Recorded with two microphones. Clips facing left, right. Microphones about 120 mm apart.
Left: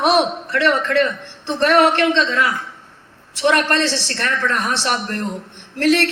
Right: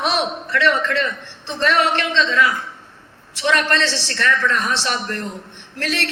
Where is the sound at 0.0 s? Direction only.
50° left (ahead or behind).